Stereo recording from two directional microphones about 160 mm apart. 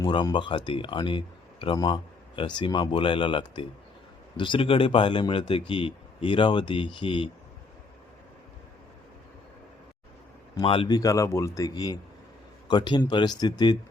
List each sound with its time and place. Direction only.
0.0 s speech: 25° left (ahead or behind)
10.5 s a man's voice: 30° left (ahead or behind)